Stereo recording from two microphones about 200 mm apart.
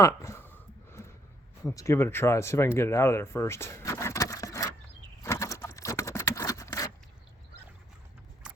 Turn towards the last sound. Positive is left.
turn(degrees=15)  # may be behind; listen again after turning